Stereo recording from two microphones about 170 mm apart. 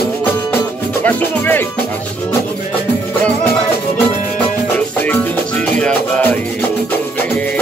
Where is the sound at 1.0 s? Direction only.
10° left (ahead or behind).